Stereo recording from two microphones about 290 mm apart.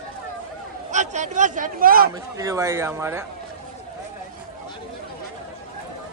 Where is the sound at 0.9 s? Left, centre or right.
Right.